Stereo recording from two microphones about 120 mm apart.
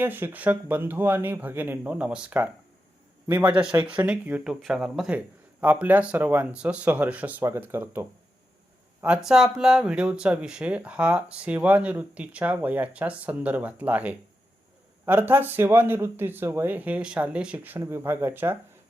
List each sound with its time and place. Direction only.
0.0 s speech: 20° right (ahead or behind)